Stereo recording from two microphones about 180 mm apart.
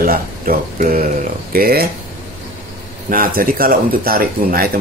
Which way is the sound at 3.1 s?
50° right (ahead or behind).